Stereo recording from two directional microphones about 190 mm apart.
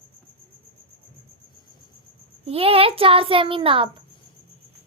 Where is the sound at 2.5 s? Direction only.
30° right (ahead or behind).